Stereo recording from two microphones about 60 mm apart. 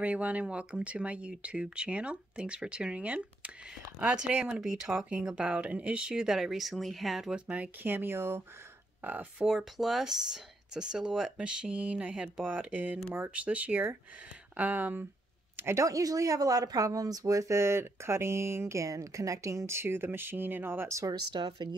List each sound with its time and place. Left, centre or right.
0.0 s speech: right
4.6 s speech: centre
7.8 s speech: right
9.0 s speech: right
9.5 s speech: centre; by 15.0 s right
15.8 s speech: right